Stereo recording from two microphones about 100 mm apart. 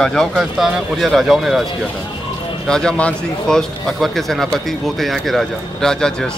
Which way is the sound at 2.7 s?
5° left (ahead or behind).